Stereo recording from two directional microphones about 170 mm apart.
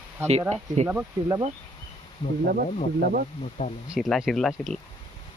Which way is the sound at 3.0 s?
60° right (ahead or behind).